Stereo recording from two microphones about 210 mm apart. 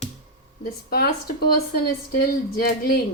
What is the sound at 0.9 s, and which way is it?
Speech, 50° left (ahead or behind).